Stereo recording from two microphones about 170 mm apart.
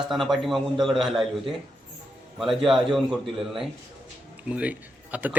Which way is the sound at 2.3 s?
Centre (ahead or behind).